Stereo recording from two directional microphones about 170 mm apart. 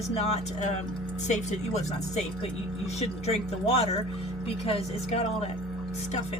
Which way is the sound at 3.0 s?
40° left (ahead or behind).